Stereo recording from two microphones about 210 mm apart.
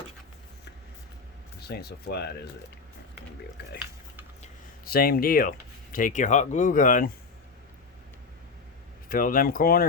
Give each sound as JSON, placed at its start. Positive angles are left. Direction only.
{"t": 1.6, "sound": "speech", "side_deg": 50}
{"t": 4.9, "sound": "speech", "side_deg": 45}
{"t": 9.0, "sound": "speech", "side_deg": 40}